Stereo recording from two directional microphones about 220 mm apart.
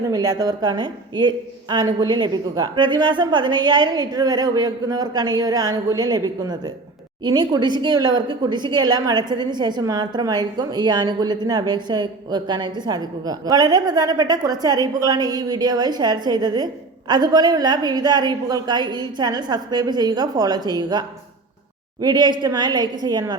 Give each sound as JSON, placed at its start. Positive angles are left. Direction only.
{"t": 0.1, "sound": "a woman's voice", "side_deg": -15}
{"t": 22.0, "sound": "a woman's voice", "side_deg": -20}